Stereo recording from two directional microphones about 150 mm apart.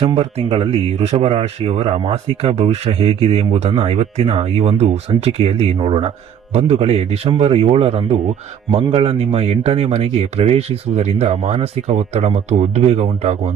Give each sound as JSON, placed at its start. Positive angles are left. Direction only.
{"t": 0.0, "sound": "speech", "side_deg": -40}